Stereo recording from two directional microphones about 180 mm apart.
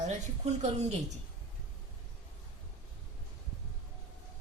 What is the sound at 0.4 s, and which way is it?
Speech, 40° right (ahead or behind).